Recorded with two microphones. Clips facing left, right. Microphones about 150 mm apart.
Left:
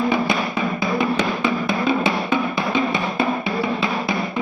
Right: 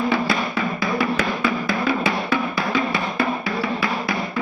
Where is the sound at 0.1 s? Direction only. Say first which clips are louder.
Left 1 dB; 20° left (ahead or behind).